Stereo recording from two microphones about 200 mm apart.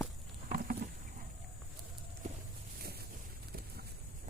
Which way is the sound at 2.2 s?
35° right (ahead or behind).